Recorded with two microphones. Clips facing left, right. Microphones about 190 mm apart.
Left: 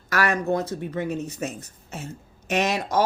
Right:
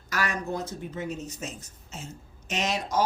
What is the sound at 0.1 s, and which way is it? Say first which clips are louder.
A woman's voice: left 7 dB; 65° left (ahead or behind).